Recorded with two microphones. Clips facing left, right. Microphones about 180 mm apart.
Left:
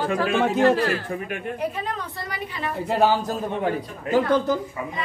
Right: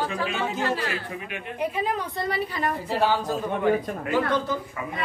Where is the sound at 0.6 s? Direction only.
45° left (ahead or behind).